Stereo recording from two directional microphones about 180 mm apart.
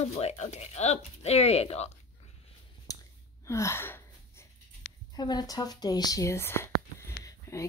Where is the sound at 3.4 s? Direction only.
15° left (ahead or behind).